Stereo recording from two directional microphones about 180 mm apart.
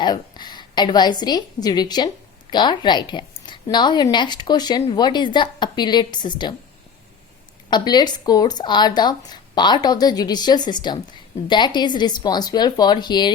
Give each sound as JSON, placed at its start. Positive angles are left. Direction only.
{"t": 0.0, "sound": "a woman's voice", "side_deg": 25}
{"t": 7.7, "sound": "a woman's voice", "side_deg": 25}